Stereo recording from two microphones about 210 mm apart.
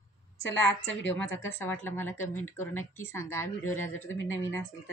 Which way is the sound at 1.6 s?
10° left (ahead or behind).